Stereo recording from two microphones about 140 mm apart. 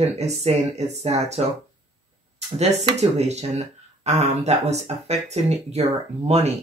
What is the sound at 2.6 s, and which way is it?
Speech, 50° right (ahead or behind).